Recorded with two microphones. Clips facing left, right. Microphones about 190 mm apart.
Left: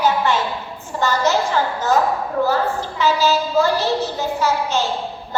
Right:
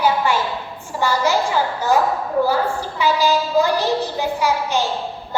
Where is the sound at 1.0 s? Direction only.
10° right (ahead or behind).